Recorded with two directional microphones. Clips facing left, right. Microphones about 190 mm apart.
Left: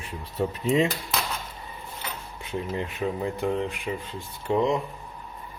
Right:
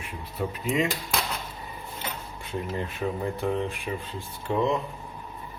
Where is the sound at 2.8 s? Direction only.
15° left (ahead or behind).